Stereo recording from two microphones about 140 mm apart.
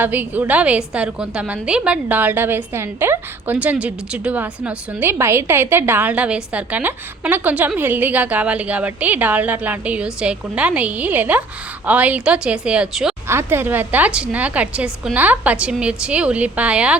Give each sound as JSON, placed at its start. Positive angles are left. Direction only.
{"t": 0.0, "sound": "a woman's voice", "side_deg": -10}
{"t": 13.2, "sound": "a woman's voice", "side_deg": -15}